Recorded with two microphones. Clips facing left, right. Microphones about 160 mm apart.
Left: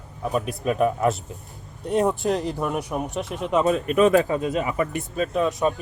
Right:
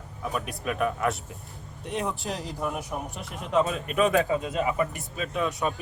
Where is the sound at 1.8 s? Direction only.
40° left (ahead or behind).